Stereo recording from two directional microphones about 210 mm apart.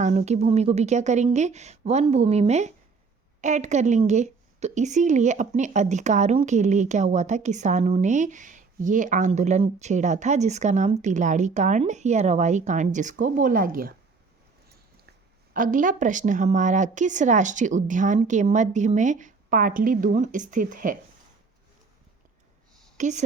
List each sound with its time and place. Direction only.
0.0 s a woman's voice: 35° right (ahead or behind)
15.5 s a woman's voice: 40° right (ahead or behind)
23.0 s speech: 35° right (ahead or behind)